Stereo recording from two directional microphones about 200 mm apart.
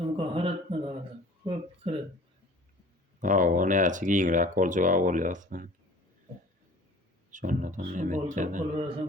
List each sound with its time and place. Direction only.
0.2 s a sound: 30° right (ahead or behind)
3.2 s speech: 40° right (ahead or behind)
7.3 s a man's voice: 40° right (ahead or behind)